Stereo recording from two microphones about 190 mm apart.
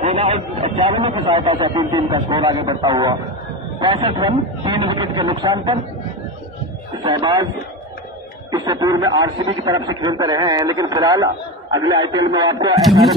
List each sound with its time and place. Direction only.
0.0 s speech: 30° right (ahead or behind)
7.0 s speech: 25° right (ahead or behind)
8.5 s speech: 20° right (ahead or behind)